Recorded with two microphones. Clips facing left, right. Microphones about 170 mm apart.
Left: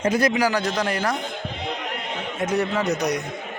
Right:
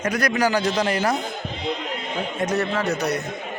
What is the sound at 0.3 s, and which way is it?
Speech, 5° left (ahead or behind).